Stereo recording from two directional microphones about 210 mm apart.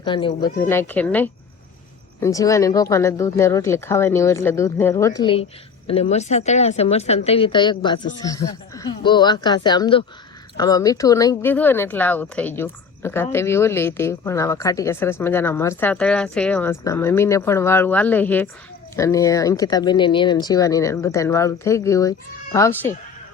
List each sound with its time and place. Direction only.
0.0 s a woman's voice: 25° left (ahead or behind)
0.6 s a woman's voice: 10° left (ahead or behind)